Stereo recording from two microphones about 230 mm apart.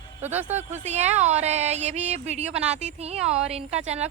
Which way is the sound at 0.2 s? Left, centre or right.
Centre.